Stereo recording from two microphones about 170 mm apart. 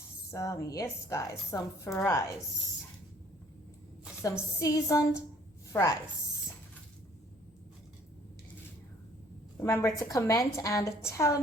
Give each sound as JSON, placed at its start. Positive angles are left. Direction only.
{"t": 0.3, "sound": "a woman's voice", "side_deg": 15}
{"t": 4.2, "sound": "a woman's voice", "side_deg": 20}
{"t": 9.6, "sound": "a woman's voice", "side_deg": 15}